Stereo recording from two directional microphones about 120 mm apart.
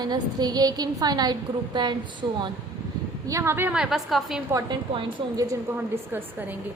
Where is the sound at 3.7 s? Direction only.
5° right (ahead or behind).